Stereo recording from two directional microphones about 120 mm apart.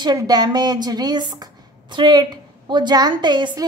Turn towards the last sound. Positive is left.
turn(degrees=-40)  # may be behind; listen again after turning